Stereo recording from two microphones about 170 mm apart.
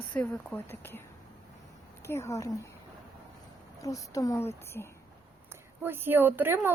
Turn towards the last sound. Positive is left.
turn(degrees=-15)  # may be behind; listen again after turning